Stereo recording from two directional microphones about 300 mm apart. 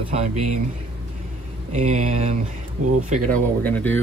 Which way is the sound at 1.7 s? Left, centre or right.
Right.